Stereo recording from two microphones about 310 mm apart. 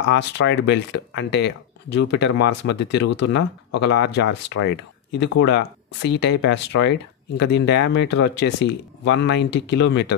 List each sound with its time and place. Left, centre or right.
0.1 s speech: left